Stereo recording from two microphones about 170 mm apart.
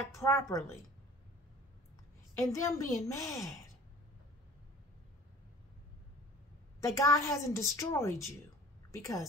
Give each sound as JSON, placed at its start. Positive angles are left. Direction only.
{"t": 0.1, "sound": "a woman's voice", "side_deg": 15}
{"t": 2.3, "sound": "a woman's voice", "side_deg": 20}
{"t": 6.9, "sound": "a woman's voice", "side_deg": 15}